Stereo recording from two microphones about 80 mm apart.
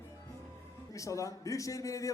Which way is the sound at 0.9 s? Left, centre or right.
Left.